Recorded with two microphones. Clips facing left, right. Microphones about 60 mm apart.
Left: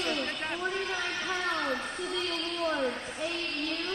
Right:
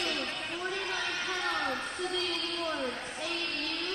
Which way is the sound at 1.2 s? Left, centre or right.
Centre.